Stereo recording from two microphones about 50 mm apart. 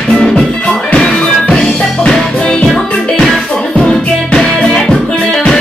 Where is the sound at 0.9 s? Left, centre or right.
Centre.